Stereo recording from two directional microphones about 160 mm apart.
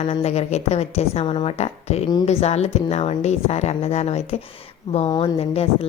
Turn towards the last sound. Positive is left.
turn(degrees=35)  # may be behind; listen again after turning